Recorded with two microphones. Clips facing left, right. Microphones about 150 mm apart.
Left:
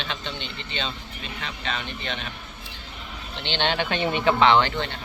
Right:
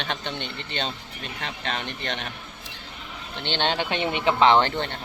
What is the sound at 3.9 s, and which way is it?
Speech, 25° right (ahead or behind).